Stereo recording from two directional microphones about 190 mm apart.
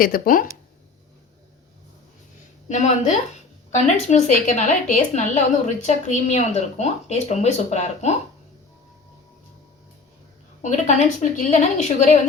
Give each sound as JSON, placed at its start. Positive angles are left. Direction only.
{"t": 0.0, "sound": "speech", "side_deg": 50}
{"t": 2.6, "sound": "speech", "side_deg": 40}
{"t": 10.6, "sound": "speech", "side_deg": 40}